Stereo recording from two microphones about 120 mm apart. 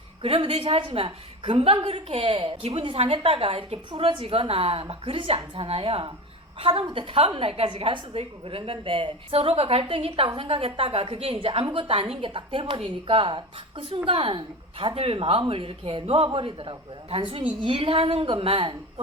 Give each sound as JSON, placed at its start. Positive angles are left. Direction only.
{"t": 0.2, "sound": "a woman's voice", "side_deg": -50}